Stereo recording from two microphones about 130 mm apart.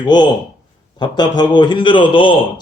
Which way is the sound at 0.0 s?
35° left (ahead or behind).